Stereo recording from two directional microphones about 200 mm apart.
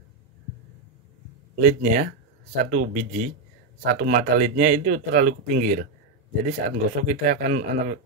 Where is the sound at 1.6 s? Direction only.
45° right (ahead or behind).